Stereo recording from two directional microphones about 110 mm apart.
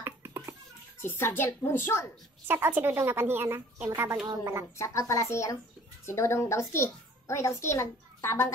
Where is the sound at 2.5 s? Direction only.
20° right (ahead or behind).